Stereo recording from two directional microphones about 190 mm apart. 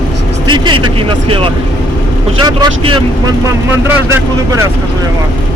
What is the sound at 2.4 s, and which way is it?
Speech, 20° right (ahead or behind).